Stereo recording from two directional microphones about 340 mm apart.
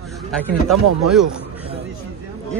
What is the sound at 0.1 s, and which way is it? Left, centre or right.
Speech, centre.